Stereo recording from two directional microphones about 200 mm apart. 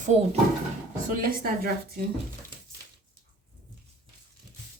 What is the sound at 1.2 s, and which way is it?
Speech, 45° right (ahead or behind).